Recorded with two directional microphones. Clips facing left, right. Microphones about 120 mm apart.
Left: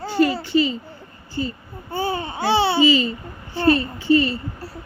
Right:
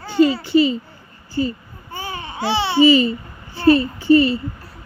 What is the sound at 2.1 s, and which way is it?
Babbling, 35° left (ahead or behind).